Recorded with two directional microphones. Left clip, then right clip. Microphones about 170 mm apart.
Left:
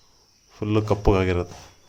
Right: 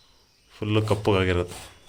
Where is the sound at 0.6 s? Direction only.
20° left (ahead or behind).